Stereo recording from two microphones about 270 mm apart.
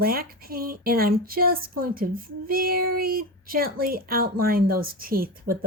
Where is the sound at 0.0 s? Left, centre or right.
Right.